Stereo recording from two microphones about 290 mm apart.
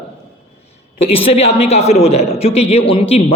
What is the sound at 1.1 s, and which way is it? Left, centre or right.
A man's voice, centre.